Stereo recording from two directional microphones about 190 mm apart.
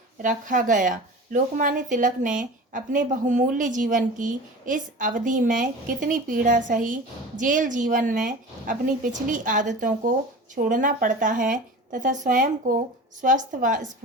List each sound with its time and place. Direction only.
0.2 s speech: 45° right (ahead or behind)